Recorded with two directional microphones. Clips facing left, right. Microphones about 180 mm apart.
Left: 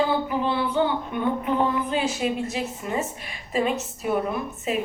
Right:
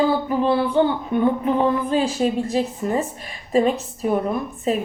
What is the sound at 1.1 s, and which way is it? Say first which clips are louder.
A woman's voice: right 5 dB; 35° right (ahead or behind).